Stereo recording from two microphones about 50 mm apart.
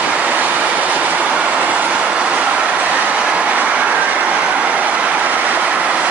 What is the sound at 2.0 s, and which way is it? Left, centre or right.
Train, right.